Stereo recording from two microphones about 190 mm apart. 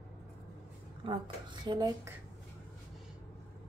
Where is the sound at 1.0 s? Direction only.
25° right (ahead or behind).